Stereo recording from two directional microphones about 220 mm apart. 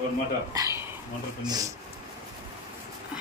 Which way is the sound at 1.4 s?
20° right (ahead or behind).